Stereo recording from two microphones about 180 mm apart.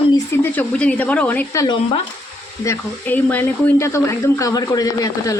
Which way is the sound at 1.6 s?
25° left (ahead or behind).